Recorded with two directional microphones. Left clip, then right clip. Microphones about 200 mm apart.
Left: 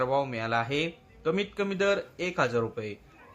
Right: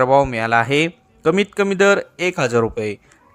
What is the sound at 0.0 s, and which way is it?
Speech, 40° right (ahead or behind).